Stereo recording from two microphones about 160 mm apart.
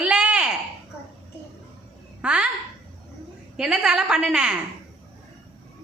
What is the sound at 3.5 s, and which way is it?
A woman's voice, 5° right (ahead or behind).